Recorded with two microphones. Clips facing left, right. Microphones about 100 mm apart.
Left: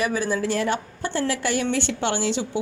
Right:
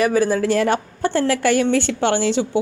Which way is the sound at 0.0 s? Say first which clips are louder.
Right 7 dB; 50° right (ahead or behind).